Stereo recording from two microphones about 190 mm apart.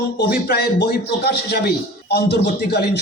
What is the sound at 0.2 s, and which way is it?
A man's voice, 55° left (ahead or behind).